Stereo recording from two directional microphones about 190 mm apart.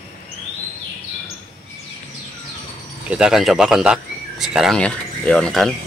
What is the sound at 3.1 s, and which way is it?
Speech, 5° right (ahead or behind).